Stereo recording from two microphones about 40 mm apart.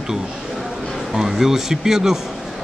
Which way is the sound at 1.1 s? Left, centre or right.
Centre.